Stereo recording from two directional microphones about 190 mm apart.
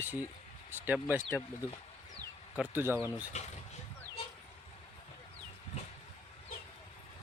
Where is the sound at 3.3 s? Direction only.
35° left (ahead or behind).